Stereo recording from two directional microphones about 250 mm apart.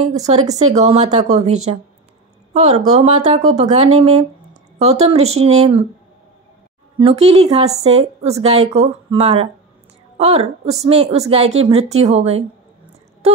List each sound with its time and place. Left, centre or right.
0.3 s a woman's voice: right
1.4 s a woman's voice: right
2.5 s a woman's voice: right
4.7 s a woman's voice: right
7.0 s a woman's voice: right
13.2 s wail: right